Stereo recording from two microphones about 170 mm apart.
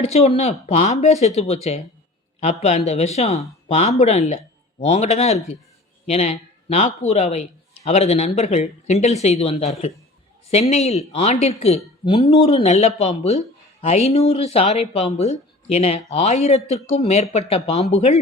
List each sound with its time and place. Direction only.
0.0 s speech: 40° left (ahead or behind)